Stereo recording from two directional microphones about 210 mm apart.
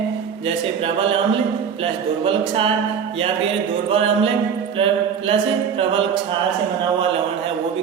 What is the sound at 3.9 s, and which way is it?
Mantra, 25° right (ahead or behind).